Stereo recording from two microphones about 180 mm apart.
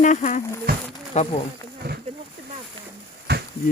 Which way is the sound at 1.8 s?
65° right (ahead or behind).